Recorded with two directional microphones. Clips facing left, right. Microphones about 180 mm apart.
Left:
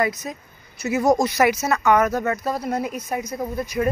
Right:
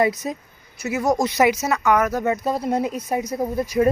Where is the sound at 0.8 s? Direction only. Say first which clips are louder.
Left 2 dB; 5° right (ahead or behind).